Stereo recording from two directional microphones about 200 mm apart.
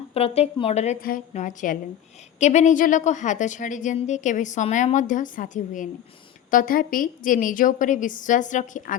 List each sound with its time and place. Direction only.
0.1 s a woman's voice: 30° left (ahead or behind)